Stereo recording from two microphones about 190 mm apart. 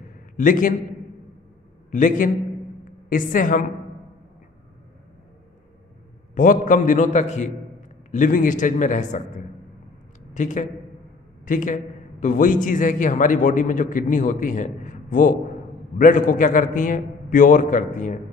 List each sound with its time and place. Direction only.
0.4 s a man's voice: 45° left (ahead or behind)
1.9 s a man's voice: 45° left (ahead or behind)
6.3 s a man's voice: 45° left (ahead or behind)